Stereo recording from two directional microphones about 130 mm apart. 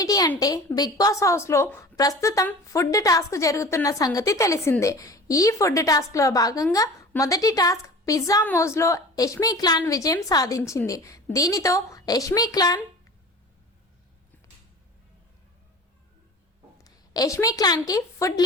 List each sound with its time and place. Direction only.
0.0 s a woman's voice: 30° left (ahead or behind)
16.8 s a woman's voice: 25° left (ahead or behind)